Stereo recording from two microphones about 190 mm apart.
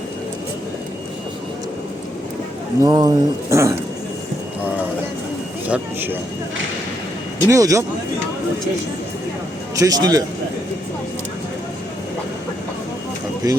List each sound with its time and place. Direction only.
2.8 s speech: 20° right (ahead or behind)
5.6 s speech: 10° right (ahead or behind)
7.4 s speech: 15° right (ahead or behind)
9.7 s speech: 20° right (ahead or behind)
13.4 s speech: 20° right (ahead or behind)